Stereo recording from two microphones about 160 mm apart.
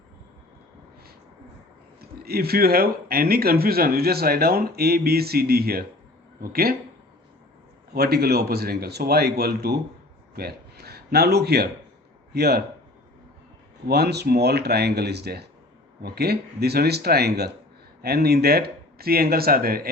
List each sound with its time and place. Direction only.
2.0 s speech: 75° right (ahead or behind)
7.9 s speech: 80° right
13.8 s speech: 85° right; by 19.9 s 70° right (ahead or behind)